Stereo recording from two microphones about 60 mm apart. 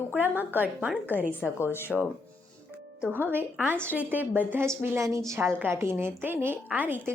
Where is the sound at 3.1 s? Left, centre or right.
Right.